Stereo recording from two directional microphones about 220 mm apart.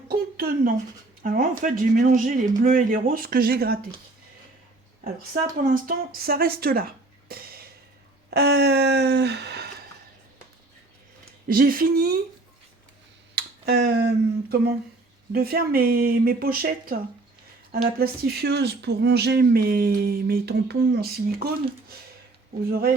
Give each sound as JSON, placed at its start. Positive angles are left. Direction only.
{"t": 0.1, "sound": "a sound", "side_deg": -40}
{"t": 1.2, "sound": "speech", "side_deg": -40}
{"t": 5.3, "sound": "speech", "side_deg": -40}
{"t": 11.4, "sound": "speech", "side_deg": -40}
{"t": 13.3, "sound": "a sound", "side_deg": -50}
{"t": 15.3, "sound": "speech", "side_deg": -45}